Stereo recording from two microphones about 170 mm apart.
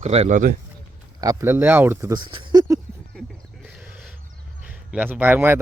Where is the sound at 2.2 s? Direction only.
30° right (ahead or behind).